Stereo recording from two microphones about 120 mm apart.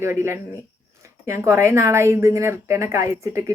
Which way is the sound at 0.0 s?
20° right (ahead or behind).